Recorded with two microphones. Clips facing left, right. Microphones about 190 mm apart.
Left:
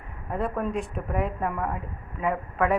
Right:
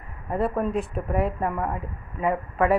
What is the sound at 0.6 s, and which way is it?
A woman's voice, centre (ahead or behind).